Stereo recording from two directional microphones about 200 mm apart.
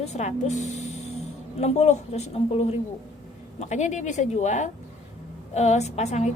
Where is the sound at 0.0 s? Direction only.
35° left (ahead or behind).